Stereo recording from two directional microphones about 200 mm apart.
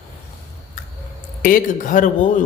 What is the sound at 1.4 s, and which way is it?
Speech, 40° left (ahead or behind).